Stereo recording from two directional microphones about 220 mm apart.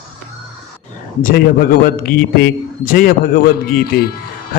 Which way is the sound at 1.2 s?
40° left (ahead or behind).